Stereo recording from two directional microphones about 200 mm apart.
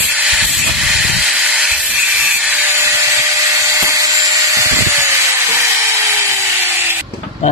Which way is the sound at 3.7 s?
15° right (ahead or behind).